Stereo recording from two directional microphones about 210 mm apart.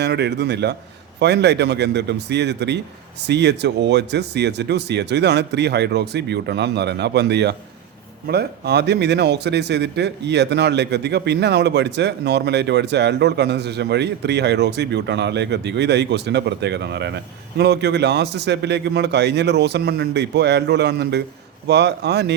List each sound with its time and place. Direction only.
0.0 s speech: 55° right (ahead or behind)